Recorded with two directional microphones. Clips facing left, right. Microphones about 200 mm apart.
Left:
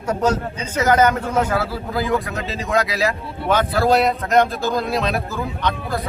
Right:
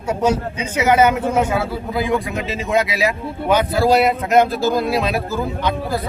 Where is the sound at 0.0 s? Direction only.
10° right (ahead or behind).